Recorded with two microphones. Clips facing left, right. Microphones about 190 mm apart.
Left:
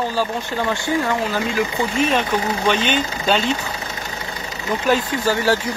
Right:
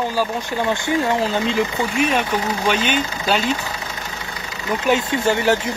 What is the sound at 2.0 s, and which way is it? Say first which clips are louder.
Speech: left 1 dB; 10° right (ahead or behind).